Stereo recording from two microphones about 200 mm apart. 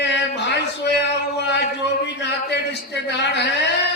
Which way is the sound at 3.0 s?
60° left (ahead or behind).